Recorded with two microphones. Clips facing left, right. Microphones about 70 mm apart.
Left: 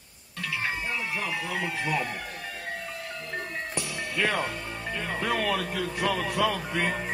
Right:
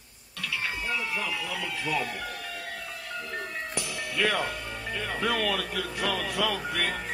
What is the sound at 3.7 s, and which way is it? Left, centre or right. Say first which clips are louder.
Music: even; left.